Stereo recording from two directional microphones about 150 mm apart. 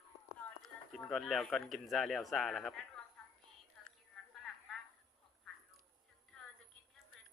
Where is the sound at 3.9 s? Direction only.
Centre (ahead or behind).